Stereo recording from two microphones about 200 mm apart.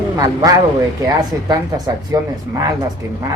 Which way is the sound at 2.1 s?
20° right (ahead or behind).